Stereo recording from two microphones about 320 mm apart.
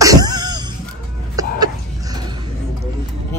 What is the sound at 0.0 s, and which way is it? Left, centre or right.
Music, centre.